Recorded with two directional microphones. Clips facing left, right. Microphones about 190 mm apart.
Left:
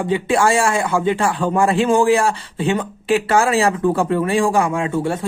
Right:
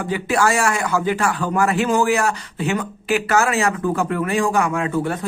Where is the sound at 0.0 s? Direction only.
25° left (ahead or behind).